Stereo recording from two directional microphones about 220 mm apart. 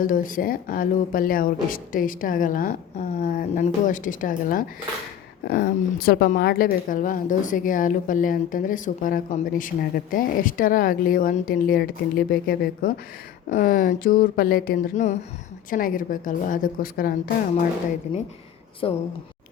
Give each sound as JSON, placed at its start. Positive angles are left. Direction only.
{"t": 0.0, "sound": "a woman's voice", "side_deg": 40}
{"t": 18.8, "sound": "a woman's voice", "side_deg": 25}